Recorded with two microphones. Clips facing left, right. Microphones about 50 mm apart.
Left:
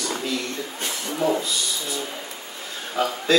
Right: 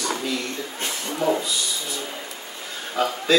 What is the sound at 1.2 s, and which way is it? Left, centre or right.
Speech, centre.